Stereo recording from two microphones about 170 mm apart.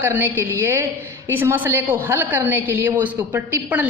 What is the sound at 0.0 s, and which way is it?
A woman's voice, 15° right (ahead or behind).